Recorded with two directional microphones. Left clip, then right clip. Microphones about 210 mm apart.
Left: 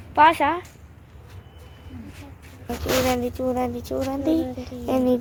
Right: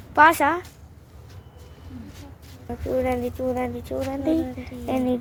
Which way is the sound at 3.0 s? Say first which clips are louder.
Left 2 dB; 10° left (ahead or behind).